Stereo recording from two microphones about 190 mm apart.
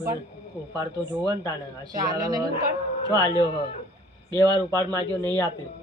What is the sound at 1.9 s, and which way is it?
Speech, 20° right (ahead or behind).